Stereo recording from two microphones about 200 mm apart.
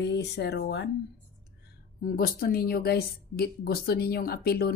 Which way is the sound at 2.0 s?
45° left (ahead or behind).